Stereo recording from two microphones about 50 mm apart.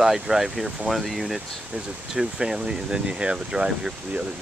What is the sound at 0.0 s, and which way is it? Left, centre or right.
Speech, centre.